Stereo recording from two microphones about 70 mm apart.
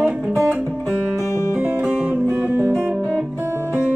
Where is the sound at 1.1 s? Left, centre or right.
Left.